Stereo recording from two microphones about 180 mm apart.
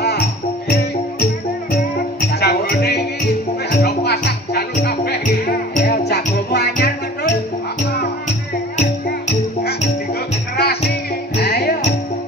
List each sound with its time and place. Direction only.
2.4 s music: 65° left (ahead or behind); by 5.9 s 45° left (ahead or behind)
6.0 s music: 65° left (ahead or behind)
10.6 s music: 60° left (ahead or behind)